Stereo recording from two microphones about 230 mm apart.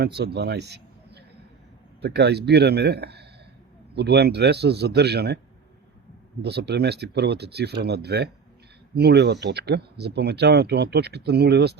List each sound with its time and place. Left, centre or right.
0.0 s a man's voice: right
6.4 s speech: right